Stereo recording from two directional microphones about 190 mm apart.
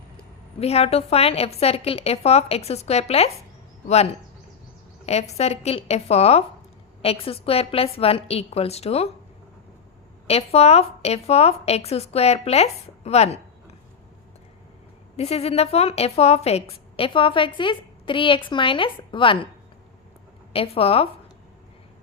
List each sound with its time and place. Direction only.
0.6 s a woman's voice: 35° left (ahead or behind)
10.2 s a woman's voice: 35° left (ahead or behind)
15.1 s a woman's voice: 35° left (ahead or behind)
20.5 s a woman's voice: 30° left (ahead or behind)